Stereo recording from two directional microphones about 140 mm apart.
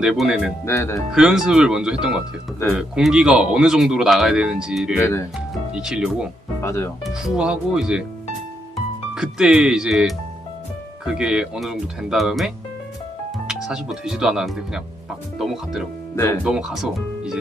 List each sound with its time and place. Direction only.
0.0 s speech: centre (ahead or behind)
0.7 s speech: 20° left (ahead or behind)
1.1 s speech: 5° right (ahead or behind)
6.6 s speech: 20° left (ahead or behind)
7.1 s speech: 5° right (ahead or behind)
9.1 s speech: 5° right (ahead or behind)